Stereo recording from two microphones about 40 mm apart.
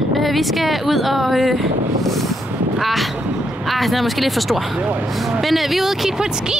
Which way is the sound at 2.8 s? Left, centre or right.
Centre.